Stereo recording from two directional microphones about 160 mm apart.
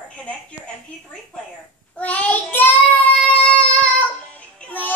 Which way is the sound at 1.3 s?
5° left (ahead or behind).